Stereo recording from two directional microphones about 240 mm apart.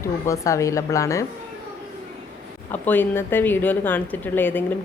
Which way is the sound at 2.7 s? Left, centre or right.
Centre.